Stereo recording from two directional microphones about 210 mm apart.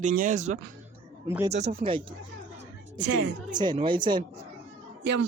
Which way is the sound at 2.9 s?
55° right (ahead or behind).